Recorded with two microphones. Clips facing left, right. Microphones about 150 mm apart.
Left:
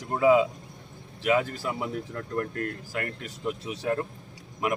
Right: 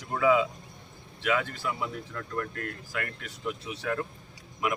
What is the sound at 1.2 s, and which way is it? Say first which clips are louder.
Speech: left 4 dB; 35° left (ahead or behind).